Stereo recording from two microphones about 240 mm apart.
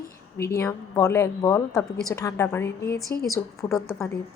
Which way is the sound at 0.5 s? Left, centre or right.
Centre.